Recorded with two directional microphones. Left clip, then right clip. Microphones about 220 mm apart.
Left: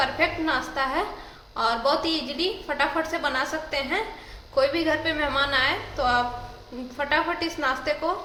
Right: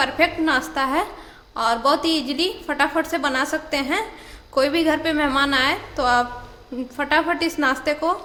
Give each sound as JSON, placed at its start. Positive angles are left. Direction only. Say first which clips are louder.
{"t": 0.0, "sound": "a woman's voice", "louder": "right 4 dB", "side_deg": -40}